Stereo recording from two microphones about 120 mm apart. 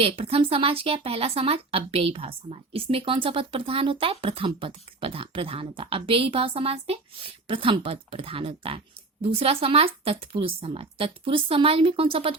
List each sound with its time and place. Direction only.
0.0 s speech: 50° right (ahead or behind)